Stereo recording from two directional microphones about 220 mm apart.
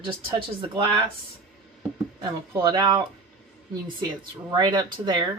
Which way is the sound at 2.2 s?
20° right (ahead or behind).